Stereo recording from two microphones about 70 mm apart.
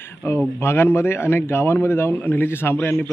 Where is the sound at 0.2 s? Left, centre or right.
Left.